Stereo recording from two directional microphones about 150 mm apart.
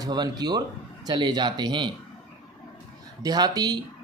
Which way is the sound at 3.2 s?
25° right (ahead or behind).